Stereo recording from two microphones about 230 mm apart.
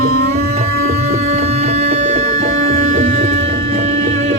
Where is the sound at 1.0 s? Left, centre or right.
Right.